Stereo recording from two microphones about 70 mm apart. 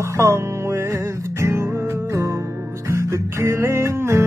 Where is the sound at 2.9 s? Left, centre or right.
Right.